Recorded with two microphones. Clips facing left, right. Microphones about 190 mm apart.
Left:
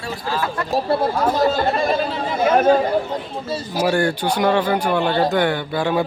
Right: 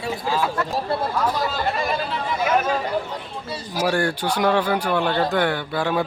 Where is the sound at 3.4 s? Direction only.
45° left (ahead or behind).